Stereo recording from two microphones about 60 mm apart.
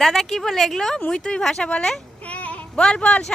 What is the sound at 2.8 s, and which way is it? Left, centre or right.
Speech, centre.